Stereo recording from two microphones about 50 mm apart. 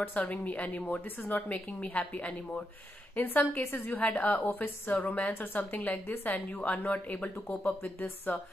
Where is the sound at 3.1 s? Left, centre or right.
Left.